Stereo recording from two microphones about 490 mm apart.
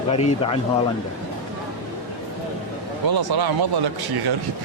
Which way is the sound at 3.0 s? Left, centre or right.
Right.